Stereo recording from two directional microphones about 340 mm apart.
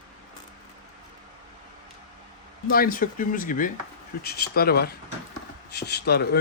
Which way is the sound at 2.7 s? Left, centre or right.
Left.